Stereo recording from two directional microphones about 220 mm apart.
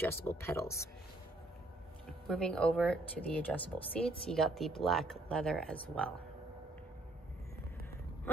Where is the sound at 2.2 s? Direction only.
5° left (ahead or behind).